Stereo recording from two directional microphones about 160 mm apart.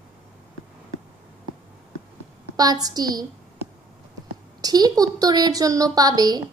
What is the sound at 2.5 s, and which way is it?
Speech, 25° right (ahead or behind).